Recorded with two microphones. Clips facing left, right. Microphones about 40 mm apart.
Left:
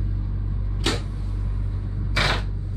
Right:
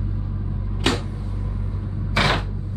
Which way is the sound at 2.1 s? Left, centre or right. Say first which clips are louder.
Right 3 dB; centre.